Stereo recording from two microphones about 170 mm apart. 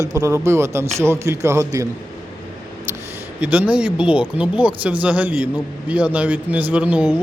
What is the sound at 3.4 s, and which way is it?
Speech, 10° right (ahead or behind).